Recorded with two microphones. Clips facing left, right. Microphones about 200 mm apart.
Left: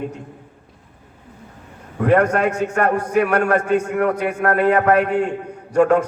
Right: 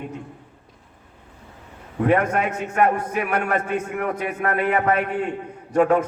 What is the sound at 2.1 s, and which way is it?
A man's voice, 70° left (ahead or behind).